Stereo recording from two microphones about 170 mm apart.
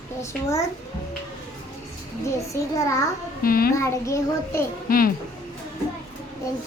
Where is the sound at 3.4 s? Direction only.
60° left (ahead or behind).